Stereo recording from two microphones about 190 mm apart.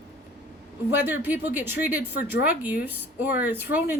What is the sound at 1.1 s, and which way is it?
Speech, 10° right (ahead or behind).